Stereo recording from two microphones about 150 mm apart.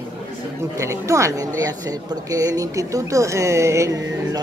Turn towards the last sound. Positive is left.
turn(degrees=-20)  # may be behind; listen again after turning